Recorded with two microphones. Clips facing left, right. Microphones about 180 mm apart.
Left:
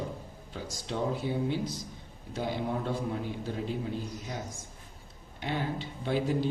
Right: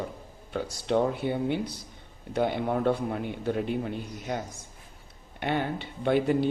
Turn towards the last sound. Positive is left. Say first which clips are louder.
# right 5 dB
turn(degrees=-60)  # may be behind; listen again after turning